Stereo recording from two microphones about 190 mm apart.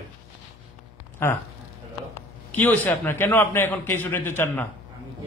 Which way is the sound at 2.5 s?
10° left (ahead or behind).